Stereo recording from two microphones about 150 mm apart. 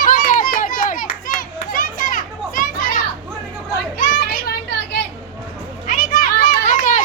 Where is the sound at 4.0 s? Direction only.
75° left (ahead or behind).